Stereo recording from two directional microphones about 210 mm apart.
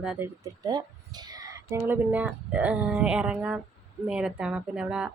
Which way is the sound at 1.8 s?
5° right (ahead or behind).